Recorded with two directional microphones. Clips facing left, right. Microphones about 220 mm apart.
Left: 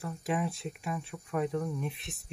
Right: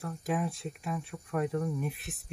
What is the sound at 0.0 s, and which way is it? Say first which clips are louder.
Speech: even; centre (ahead or behind).